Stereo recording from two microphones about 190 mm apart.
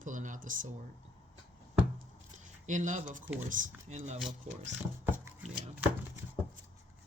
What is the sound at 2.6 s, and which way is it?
Speech, 40° right (ahead or behind).